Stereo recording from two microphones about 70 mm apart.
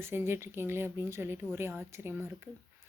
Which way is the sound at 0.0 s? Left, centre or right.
Right.